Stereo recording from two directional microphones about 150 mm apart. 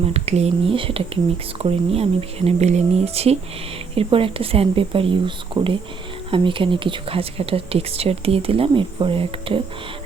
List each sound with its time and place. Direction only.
0.1 s speech: 45° right (ahead or behind)